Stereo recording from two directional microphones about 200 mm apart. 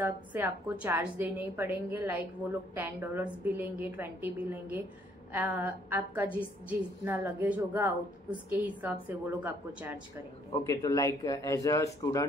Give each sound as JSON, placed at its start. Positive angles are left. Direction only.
{"t": 0.0, "sound": "a woman's voice", "side_deg": -10}
{"t": 10.6, "sound": "speech", "side_deg": 15}